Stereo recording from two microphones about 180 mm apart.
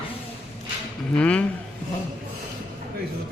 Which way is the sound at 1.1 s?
5° left (ahead or behind).